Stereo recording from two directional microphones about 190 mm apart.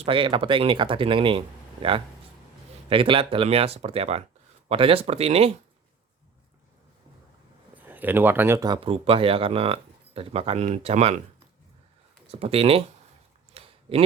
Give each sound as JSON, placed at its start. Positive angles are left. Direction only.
{"t": 0.0, "sound": "speech", "side_deg": -25}
{"t": 7.8, "sound": "speech", "side_deg": -10}
{"t": 12.3, "sound": "speech", "side_deg": -30}
{"t": 13.5, "sound": "a sound", "side_deg": -30}